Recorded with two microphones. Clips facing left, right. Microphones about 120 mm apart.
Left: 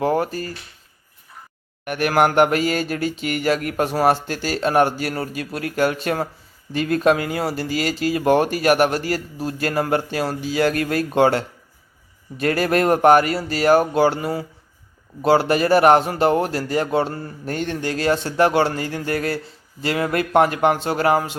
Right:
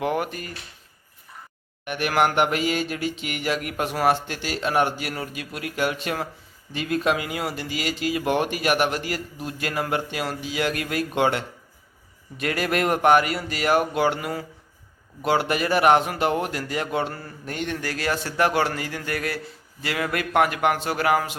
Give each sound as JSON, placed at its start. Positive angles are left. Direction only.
{"t": 0.0, "sound": "speech", "side_deg": 35}
{"t": 1.8, "sound": "speech", "side_deg": 45}